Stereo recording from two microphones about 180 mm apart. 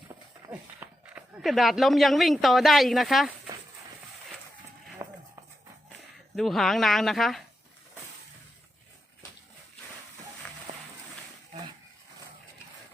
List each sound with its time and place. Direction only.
0.4 s speech: 10° right (ahead or behind)
5.0 s a sound: 15° right (ahead or behind)
6.3 s speech: centre (ahead or behind)